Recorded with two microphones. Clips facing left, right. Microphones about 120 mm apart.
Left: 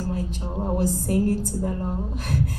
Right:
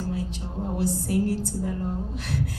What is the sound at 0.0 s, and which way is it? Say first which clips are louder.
A woman's voice: left 2 dB; 45° left (ahead or behind).